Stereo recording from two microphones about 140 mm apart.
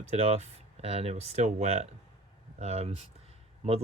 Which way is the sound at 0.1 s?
50° right (ahead or behind).